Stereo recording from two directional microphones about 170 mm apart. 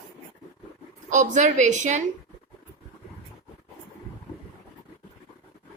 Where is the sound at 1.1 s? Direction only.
45° right (ahead or behind).